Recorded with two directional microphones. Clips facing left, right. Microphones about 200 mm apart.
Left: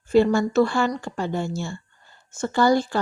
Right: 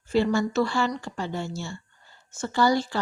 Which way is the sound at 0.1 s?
50° left (ahead or behind).